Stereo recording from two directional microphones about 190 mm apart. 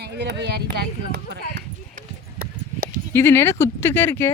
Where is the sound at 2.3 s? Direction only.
50° right (ahead or behind).